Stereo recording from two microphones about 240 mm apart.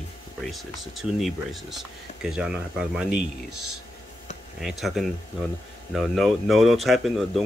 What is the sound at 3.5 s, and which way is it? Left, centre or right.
Speech, right.